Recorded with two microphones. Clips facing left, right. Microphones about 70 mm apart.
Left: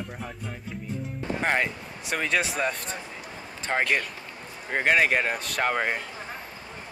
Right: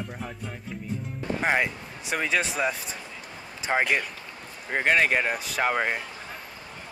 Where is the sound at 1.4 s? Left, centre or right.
Centre.